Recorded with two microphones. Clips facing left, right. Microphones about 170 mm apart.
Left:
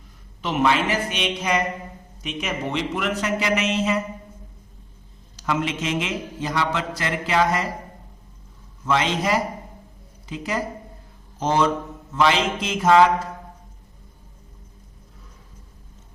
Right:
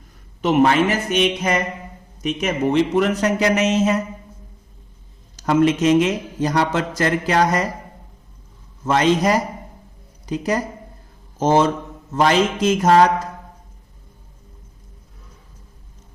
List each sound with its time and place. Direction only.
0.4 s a man's voice: 45° right (ahead or behind)
5.4 s a man's voice: 45° right (ahead or behind)
8.8 s a man's voice: 45° right (ahead or behind)